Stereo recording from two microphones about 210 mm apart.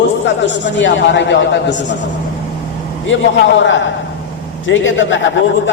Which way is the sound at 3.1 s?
60° left (ahead or behind).